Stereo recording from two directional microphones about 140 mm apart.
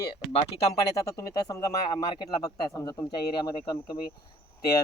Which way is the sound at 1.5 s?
30° left (ahead or behind).